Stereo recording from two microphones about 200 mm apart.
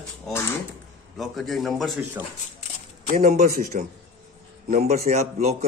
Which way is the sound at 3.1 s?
35° right (ahead or behind).